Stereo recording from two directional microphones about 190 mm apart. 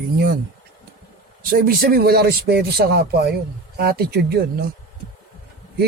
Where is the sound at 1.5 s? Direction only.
50° right (ahead or behind).